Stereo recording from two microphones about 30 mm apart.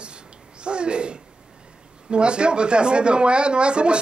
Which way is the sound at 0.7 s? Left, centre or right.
Right.